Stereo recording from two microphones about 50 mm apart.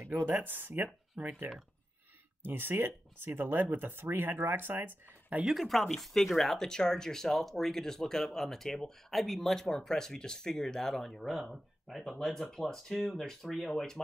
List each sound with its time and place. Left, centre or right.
0.0 s speech: right
0.8 s speech: centre
2.4 s speech: right
5.4 s speech: centre
5.9 s speech: centre